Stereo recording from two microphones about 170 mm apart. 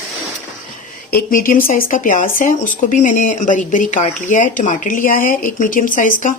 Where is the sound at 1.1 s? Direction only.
55° left (ahead or behind).